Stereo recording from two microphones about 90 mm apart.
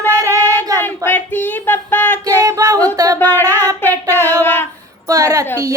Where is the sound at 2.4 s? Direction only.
40° right (ahead or behind).